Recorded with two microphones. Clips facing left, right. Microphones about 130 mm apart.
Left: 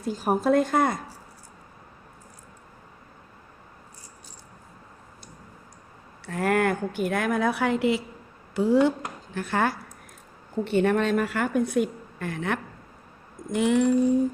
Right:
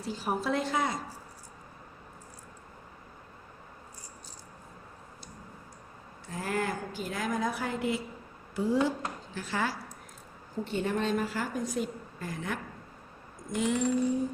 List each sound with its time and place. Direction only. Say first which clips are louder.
0.0 s a woman's voice: left 7 dB; 45° left (ahead or behind)
6.2 s a woman's voice: left 9 dB; 65° left (ahead or behind)
9.3 s speech: left 8 dB; 55° left (ahead or behind)
10.6 s a woman's voice: left 8 dB; 65° left (ahead or behind)